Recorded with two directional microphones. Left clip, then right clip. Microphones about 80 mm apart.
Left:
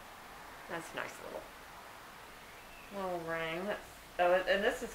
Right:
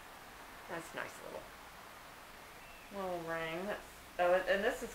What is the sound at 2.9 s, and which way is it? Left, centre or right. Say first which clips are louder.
A woman's voice: left 2 dB; centre.